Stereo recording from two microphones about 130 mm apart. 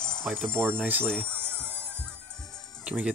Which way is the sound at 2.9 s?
10° right (ahead or behind).